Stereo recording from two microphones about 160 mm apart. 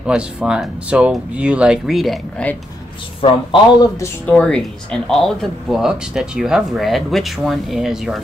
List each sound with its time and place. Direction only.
0.0 s speech: 5° right (ahead or behind)
3.2 s speech: 30° left (ahead or behind)
4.3 s speech: 5° left (ahead or behind)